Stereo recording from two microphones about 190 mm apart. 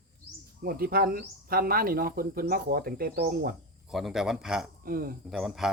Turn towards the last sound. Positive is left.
turn(degrees=0)  # may be behind; listen again after turning